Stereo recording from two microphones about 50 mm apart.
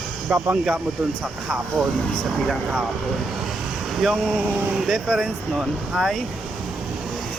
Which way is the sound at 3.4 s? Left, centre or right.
Centre.